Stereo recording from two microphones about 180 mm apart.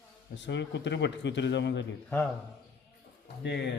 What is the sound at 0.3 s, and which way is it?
A man's voice, 80° left.